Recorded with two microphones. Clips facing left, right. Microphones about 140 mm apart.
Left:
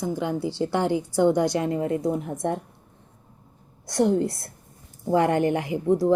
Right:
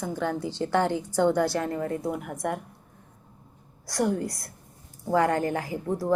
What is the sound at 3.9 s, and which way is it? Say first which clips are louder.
A woman's voice: left 5 dB; 25° left (ahead or behind).